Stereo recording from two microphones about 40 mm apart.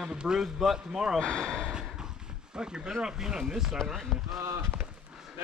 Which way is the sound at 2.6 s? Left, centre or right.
Right.